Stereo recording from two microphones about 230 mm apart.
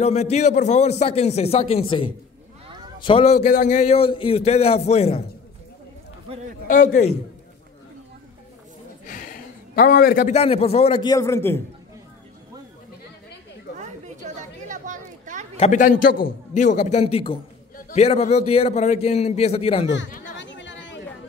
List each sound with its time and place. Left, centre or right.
0.0 s a man's voice: left
6.7 s a man's voice: left
9.0 s a man's voice: left; by 11.6 s centre
13.7 s chatter: right
15.5 s a man's voice: left
20.3 s chatter: left